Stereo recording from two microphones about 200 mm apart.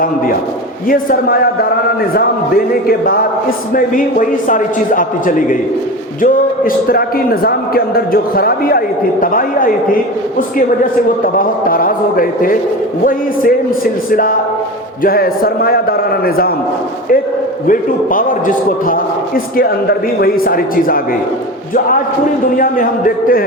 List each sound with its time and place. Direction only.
0.9 s a man's voice: 45° left (ahead or behind)
2.8 s a man's voice: 45° left (ahead or behind)
11.3 s a man's voice: 45° left (ahead or behind)
17.7 s a man's voice: 45° left (ahead or behind)
22.5 s a man's voice: 45° left (ahead or behind)